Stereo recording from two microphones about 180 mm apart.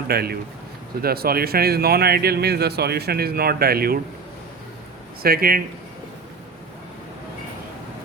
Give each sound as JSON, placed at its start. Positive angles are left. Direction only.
{"t": 0.1, "sound": "speech", "side_deg": -60}
{"t": 5.2, "sound": "speech", "side_deg": -55}